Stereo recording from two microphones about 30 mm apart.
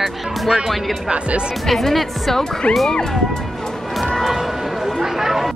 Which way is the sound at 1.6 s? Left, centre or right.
Centre.